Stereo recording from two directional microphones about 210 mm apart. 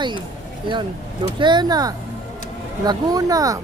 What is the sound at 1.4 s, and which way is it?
Speech, 20° right (ahead or behind).